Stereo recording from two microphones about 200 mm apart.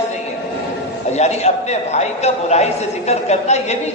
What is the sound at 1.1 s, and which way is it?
A man's voice, 35° left (ahead or behind).